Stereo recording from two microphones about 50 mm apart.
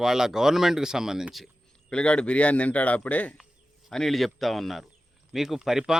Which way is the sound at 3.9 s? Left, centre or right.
Centre.